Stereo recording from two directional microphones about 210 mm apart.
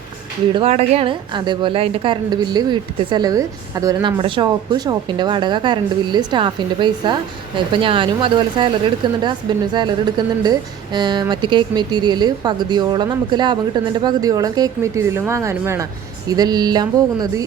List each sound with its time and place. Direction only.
0.5 s a woman's voice: 30° right (ahead or behind)